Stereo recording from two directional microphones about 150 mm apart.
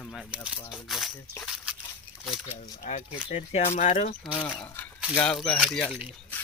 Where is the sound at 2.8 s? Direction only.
55° left (ahead or behind).